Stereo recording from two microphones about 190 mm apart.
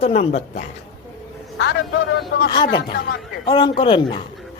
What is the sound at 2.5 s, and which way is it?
Speech, 25° left (ahead or behind).